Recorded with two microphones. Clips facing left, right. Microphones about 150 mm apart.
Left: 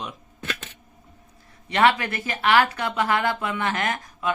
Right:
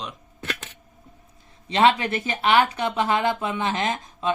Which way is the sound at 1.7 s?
20° right (ahead or behind).